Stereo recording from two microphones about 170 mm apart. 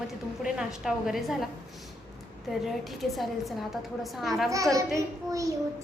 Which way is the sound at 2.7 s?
Centre (ahead or behind).